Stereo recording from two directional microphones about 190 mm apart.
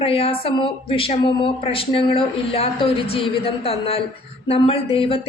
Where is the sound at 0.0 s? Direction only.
30° left (ahead or behind).